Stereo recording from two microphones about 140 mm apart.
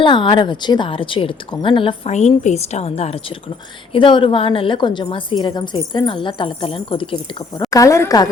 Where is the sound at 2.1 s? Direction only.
55° left (ahead or behind); by 7.6 s 35° left (ahead or behind).